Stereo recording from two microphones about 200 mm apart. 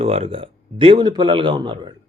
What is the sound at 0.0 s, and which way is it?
Speech, 30° right (ahead or behind).